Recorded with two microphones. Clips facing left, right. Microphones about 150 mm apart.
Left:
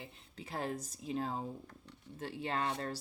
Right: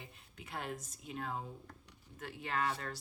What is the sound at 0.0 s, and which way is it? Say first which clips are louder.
Speech: left 4 dB; 35° left (ahead or behind).